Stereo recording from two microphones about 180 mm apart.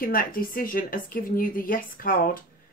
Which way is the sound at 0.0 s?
55° left (ahead or behind).